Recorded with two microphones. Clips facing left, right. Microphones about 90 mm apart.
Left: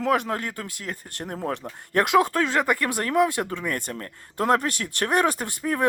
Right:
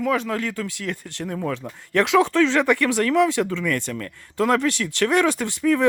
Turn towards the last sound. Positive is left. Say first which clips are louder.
# right 7 dB
turn(degrees=45)  # may be behind; listen again after turning